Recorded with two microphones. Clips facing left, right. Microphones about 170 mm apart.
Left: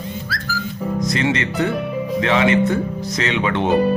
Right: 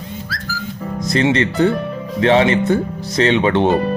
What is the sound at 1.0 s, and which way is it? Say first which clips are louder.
Speech: right 6 dB; 30° right (ahead or behind).